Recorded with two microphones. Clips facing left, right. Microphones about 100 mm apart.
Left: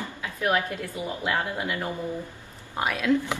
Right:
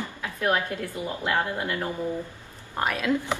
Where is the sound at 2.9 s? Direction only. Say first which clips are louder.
Left 4 dB; 10° right (ahead or behind).